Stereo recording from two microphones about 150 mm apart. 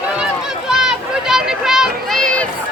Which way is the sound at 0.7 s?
5° right (ahead or behind).